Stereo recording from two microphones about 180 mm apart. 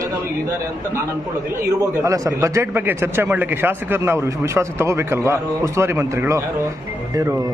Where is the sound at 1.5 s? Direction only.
15° right (ahead or behind).